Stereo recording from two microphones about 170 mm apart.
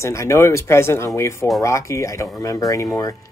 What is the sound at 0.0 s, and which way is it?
Speech, 15° left (ahead or behind).